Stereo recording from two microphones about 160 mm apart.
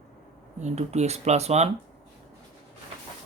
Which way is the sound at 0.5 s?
45° right (ahead or behind).